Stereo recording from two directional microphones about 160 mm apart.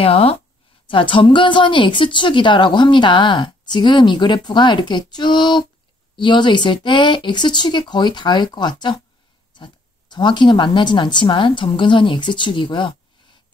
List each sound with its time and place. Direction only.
0.0 s a woman's voice: 35° left (ahead or behind)